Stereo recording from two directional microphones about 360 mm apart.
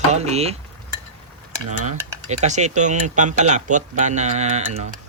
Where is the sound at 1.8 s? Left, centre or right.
Centre.